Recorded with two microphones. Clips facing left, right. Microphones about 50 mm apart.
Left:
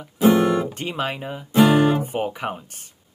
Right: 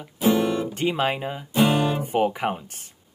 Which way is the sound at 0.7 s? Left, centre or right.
Right.